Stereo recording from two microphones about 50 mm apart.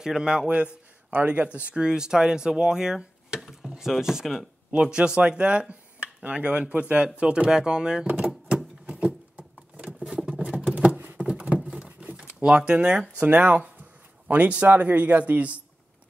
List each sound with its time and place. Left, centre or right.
0.0 s speech: centre
1.7 s speech: centre
8.8 s patter: right
10.3 s a sound: right
12.4 s speech: centre
13.2 s a man's voice: right